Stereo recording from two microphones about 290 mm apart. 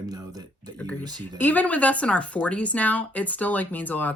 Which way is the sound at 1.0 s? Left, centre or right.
Centre.